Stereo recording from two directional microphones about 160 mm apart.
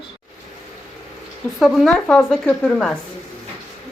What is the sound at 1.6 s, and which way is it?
Speech, centre (ahead or behind).